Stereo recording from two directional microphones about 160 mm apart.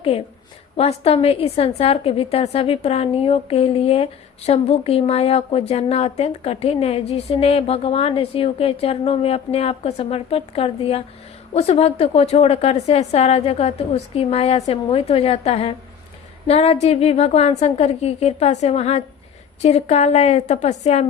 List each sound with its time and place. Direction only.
0.1 s a woman's voice: 35° left (ahead or behind)